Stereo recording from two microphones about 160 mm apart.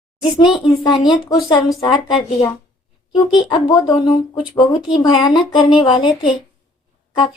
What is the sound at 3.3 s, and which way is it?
Speech, 25° left (ahead or behind).